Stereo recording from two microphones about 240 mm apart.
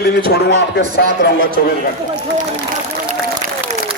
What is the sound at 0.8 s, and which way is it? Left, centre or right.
Speech, left.